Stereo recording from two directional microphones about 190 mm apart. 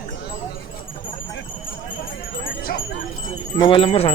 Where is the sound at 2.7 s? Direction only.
55° left (ahead or behind).